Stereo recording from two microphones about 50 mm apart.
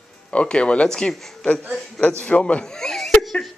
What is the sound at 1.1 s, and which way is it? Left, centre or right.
Speech, centre.